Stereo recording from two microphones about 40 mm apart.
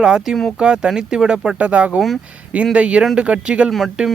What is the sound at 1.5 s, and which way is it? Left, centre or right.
Speech, right.